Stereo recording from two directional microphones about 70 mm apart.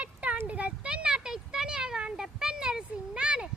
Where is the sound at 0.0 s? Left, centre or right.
Right.